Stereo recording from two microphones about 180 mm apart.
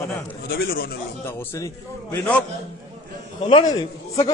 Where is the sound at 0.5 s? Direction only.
55° left (ahead or behind).